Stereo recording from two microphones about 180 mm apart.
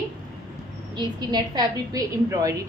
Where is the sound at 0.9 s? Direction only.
25° right (ahead or behind).